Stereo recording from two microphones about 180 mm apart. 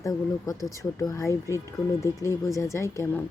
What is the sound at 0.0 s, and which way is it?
Speech, 20° left (ahead or behind).